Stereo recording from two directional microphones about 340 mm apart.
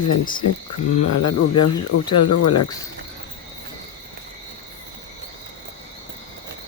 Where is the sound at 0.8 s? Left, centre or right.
Centre.